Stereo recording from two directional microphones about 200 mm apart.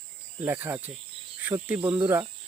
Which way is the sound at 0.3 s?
10° right (ahead or behind).